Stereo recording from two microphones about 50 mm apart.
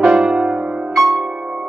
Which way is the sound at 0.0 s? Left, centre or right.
Centre.